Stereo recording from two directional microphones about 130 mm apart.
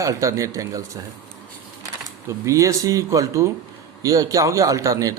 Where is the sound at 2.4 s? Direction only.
25° right (ahead or behind).